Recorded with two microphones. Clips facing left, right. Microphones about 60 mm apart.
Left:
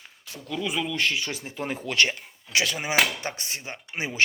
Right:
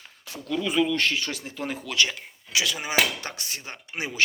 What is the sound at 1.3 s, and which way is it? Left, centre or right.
Speech, left.